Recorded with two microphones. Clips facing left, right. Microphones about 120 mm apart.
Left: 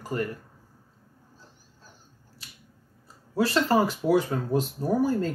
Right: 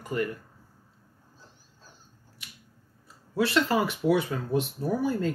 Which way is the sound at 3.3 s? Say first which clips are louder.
Left 2 dB; 35° left (ahead or behind).